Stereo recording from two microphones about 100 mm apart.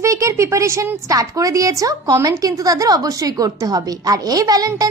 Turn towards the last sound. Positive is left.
turn(degrees=-40)  # may be behind; listen again after turning